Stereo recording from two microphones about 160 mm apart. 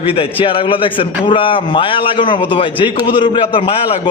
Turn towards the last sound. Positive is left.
turn(degrees=30)  # may be behind; listen again after turning